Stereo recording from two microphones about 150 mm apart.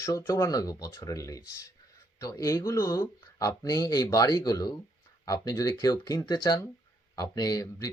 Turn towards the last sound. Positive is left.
turn(degrees=25)  # may be behind; listen again after turning